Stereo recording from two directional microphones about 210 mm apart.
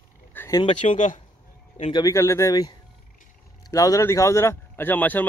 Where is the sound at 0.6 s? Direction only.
25° left (ahead or behind).